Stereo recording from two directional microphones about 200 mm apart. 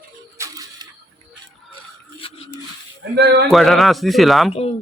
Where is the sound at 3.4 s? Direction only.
Centre (ahead or behind).